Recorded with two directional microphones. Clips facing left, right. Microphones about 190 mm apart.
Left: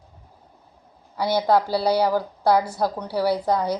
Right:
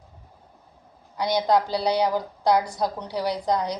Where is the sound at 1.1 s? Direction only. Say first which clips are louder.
Left 2 dB; 5° left (ahead or behind).